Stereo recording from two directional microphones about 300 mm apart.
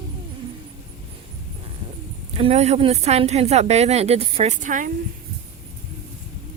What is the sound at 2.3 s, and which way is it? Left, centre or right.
A woman's voice, right.